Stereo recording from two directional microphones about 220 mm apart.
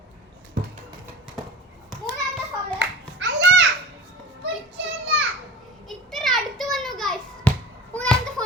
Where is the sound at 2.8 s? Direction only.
55° right (ahead or behind).